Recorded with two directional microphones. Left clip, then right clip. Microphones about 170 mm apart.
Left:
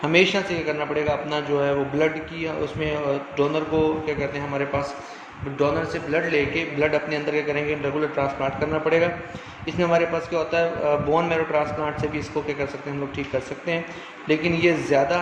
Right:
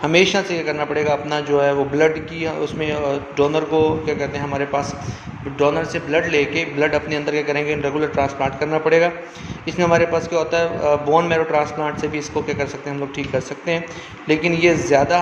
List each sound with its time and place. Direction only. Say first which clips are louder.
0.0 s a man's voice: right 3 dB; 25° right (ahead or behind)